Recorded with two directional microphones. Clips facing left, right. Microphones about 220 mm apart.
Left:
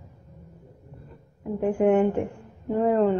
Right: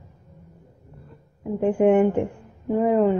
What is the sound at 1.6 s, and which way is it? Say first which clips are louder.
A woman's voice: right 3 dB; 20° right (ahead or behind).